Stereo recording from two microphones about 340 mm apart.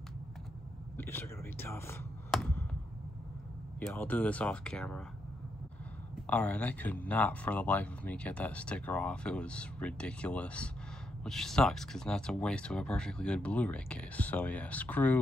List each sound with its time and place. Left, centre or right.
0.9 s a sound: centre
3.8 s speech: centre
6.2 s speech: centre